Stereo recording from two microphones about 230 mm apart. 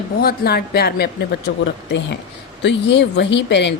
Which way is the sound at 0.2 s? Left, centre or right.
Left.